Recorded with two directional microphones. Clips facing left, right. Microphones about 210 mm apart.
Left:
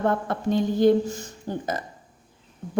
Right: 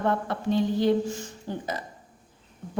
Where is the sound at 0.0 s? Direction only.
45° left (ahead or behind).